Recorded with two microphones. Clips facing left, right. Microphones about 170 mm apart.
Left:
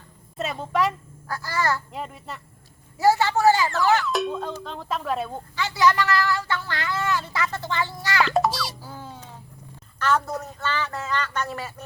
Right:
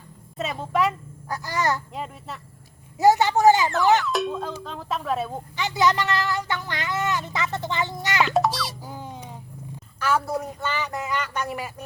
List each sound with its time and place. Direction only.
0.3 s a sound: centre (ahead or behind)
1.3 s speech: 20° right (ahead or behind)
1.9 s speech: centre (ahead or behind)
3.0 s a sound: 20° right (ahead or behind)
4.0 s music: centre (ahead or behind)
4.6 s speech: centre (ahead or behind)
5.5 s speech: 20° right (ahead or behind)
8.3 s speech: centre (ahead or behind)
8.8 s a sound: 15° right (ahead or behind)
10.0 s speech: 10° right (ahead or behind)